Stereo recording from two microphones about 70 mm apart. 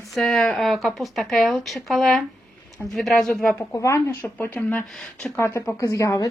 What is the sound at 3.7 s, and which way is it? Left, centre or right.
Speech, left.